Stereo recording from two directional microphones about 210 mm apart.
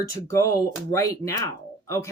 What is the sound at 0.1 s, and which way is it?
Speech, 15° left (ahead or behind).